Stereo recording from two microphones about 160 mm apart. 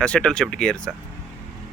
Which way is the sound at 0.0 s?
5° left (ahead or behind).